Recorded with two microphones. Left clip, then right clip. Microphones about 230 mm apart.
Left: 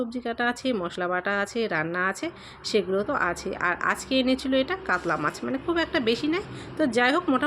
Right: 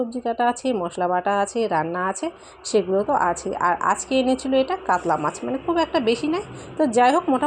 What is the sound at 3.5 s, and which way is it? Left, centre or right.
A woman's voice, centre.